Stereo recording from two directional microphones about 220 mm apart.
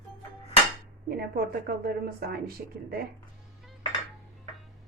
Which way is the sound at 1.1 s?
45° right (ahead or behind).